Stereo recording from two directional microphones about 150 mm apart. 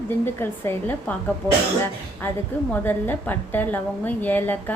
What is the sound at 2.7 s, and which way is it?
A woman's voice, 10° left (ahead or behind).